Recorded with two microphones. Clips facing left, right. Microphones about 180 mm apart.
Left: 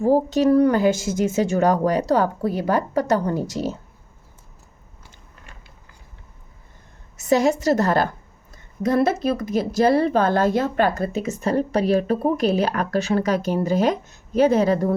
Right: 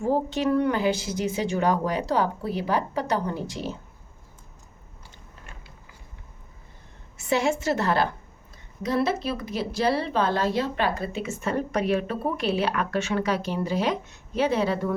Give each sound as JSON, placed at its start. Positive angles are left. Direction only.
{"t": 0.0, "sound": "a woman's voice", "side_deg": 40}
{"t": 7.2, "sound": "a woman's voice", "side_deg": 40}